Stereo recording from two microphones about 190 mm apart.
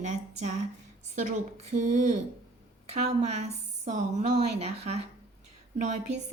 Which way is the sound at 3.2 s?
35° right (ahead or behind).